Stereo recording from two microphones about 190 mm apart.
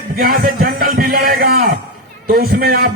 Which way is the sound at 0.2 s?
50° right (ahead or behind).